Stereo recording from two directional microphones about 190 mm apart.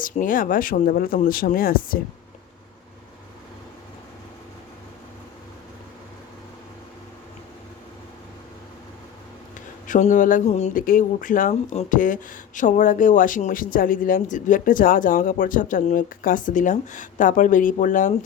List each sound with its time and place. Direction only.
0.0 s speech: 45° left (ahead or behind)
9.6 s speech: 45° left (ahead or behind)